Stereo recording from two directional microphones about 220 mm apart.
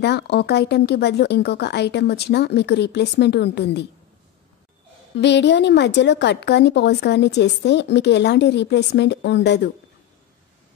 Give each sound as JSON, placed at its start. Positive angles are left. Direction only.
{"t": 0.0, "sound": "a woman's voice", "side_deg": 50}
{"t": 5.1, "sound": "a woman's voice", "side_deg": 50}